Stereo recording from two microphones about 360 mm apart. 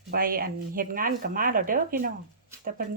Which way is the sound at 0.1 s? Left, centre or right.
Right.